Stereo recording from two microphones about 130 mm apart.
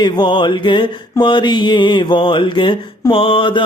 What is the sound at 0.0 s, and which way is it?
Mantra, 35° left (ahead or behind).